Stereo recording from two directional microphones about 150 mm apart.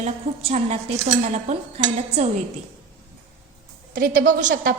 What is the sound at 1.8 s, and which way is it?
Speech, 45° right (ahead or behind).